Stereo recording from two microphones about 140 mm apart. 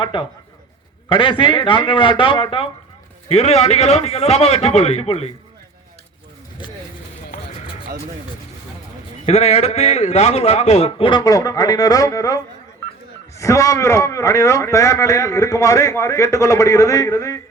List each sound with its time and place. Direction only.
0.0 s a man's voice: 40° left (ahead or behind)
3.2 s a man's voice: 50° left (ahead or behind)
9.2 s a man's voice: 50° left (ahead or behind); by 17.4 s 20° left (ahead or behind)